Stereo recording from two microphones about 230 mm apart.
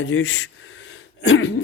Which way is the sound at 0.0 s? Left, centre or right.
Left.